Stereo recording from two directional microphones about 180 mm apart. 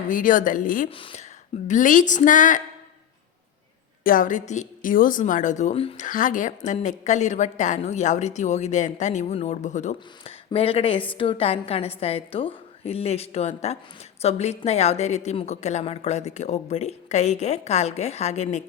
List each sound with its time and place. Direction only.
0.1 s a woman's voice: 50° left (ahead or behind)
0.9 s a woman's voice: 30° left (ahead or behind)
1.6 s a woman's voice: 45° left (ahead or behind)
4.0 s a woman's voice: 50° left (ahead or behind)
6.1 s a woman's voice: 45° left (ahead or behind)